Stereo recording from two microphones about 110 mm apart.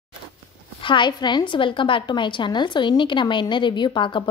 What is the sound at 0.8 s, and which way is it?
A woman's voice, 45° left (ahead or behind).